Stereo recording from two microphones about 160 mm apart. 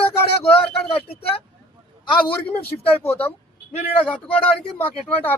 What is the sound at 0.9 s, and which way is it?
Speech, 35° left (ahead or behind).